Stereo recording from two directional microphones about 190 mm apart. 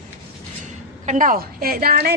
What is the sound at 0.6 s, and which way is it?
A woman's voice, 40° right (ahead or behind).